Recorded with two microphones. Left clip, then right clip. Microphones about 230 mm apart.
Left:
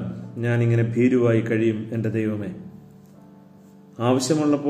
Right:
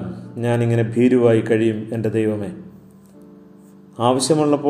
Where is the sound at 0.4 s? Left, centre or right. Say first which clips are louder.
Right 4 dB; centre.